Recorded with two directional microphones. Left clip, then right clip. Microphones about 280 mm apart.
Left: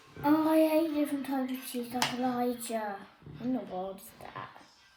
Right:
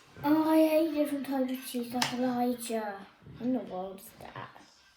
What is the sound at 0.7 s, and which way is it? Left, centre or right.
Speech, centre.